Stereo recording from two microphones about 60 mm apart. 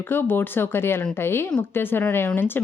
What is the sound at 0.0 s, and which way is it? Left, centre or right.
A woman's voice, left.